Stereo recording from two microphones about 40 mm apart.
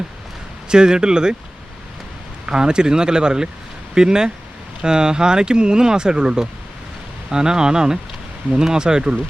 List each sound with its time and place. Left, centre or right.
0.7 s speech: centre
2.5 s speech: centre